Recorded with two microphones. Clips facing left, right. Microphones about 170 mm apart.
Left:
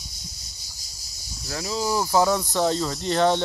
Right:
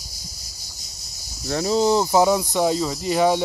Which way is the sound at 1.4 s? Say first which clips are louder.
Right 9 dB; 35° right (ahead or behind).